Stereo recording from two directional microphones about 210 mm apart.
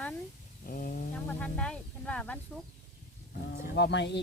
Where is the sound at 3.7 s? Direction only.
55° left (ahead or behind).